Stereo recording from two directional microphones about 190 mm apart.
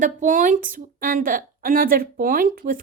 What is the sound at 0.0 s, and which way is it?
A woman's voice, 40° right (ahead or behind).